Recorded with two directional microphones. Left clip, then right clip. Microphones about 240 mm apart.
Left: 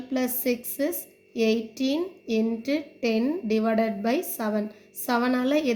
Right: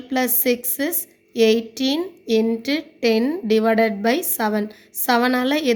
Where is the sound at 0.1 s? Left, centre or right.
Right.